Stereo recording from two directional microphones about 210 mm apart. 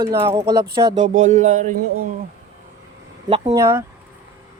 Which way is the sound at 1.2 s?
35° right (ahead or behind).